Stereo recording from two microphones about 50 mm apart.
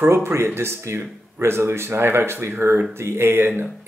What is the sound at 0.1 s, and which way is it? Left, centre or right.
Speech, right.